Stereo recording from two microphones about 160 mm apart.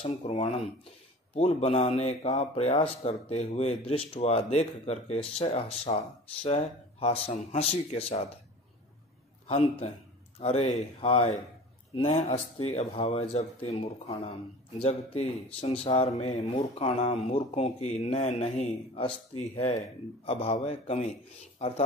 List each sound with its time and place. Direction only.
0.0 s speech: 40° left (ahead or behind)
10.4 s speech: 40° left (ahead or behind)